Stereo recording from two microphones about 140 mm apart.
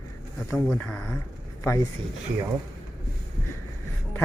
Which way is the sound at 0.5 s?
10° left (ahead or behind).